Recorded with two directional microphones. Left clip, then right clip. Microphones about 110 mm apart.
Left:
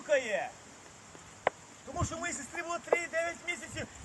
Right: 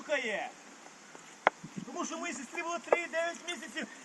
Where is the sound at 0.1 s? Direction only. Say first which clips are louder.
Left 3 dB; 30° left (ahead or behind).